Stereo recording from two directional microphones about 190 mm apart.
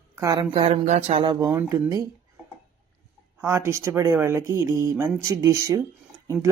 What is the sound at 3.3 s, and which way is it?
Speech, 15° right (ahead or behind).